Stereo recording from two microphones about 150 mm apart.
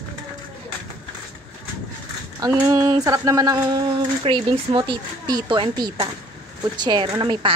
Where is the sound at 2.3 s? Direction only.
25° right (ahead or behind).